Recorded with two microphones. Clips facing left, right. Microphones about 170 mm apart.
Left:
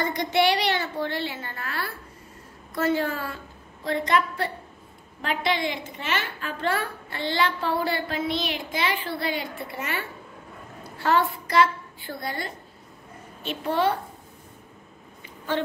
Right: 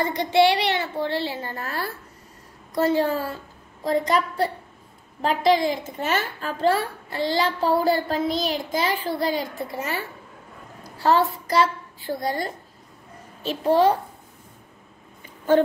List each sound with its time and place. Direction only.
0.0 s a child's voice: 30° right (ahead or behind)